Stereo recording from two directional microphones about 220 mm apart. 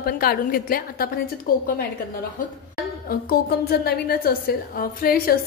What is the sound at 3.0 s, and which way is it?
A woman's voice, 45° left (ahead or behind).